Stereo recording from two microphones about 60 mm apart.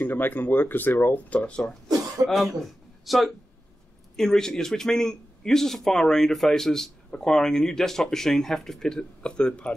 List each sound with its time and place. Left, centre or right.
0.0 s speech: left
2.2 s speech: centre